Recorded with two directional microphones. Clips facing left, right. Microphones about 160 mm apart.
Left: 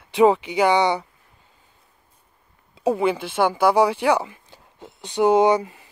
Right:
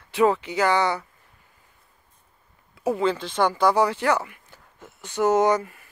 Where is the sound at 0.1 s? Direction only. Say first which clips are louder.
Left 4 dB; 15° left (ahead or behind).